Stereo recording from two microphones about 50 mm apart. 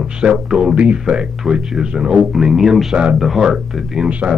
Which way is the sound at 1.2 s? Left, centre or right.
Centre.